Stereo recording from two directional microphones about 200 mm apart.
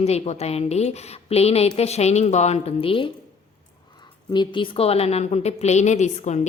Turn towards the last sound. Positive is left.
turn(degrees=35)  # may be behind; listen again after turning